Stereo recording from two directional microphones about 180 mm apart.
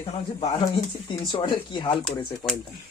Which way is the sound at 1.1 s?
25° left (ahead or behind).